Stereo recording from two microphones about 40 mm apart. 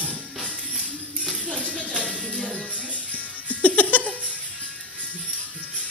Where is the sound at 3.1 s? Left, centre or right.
Left.